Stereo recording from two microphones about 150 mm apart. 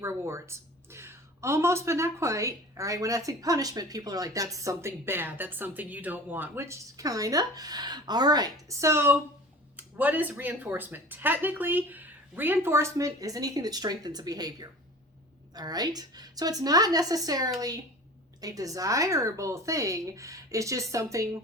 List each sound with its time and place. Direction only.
0.0 s a woman's voice: 20° right (ahead or behind)